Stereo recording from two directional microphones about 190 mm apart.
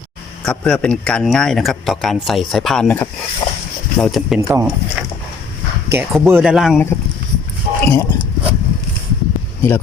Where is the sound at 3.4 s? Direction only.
25° left (ahead or behind).